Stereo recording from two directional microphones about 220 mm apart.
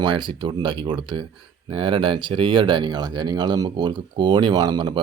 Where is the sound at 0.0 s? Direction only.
20° right (ahead or behind).